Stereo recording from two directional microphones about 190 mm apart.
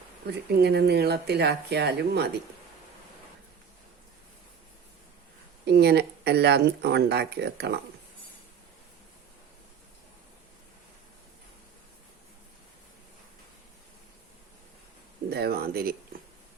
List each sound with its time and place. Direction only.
0.3 s speech: 60° right (ahead or behind)
5.6 s speech: 60° right (ahead or behind)
15.3 s speech: 55° right (ahead or behind)